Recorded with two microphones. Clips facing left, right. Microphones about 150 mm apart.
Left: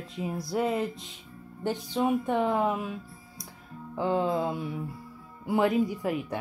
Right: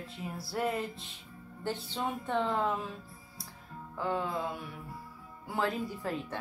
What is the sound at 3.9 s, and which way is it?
Music, 25° left (ahead or behind).